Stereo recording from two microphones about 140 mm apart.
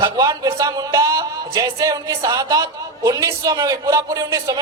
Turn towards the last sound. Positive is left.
turn(degrees=-25)  # may be behind; listen again after turning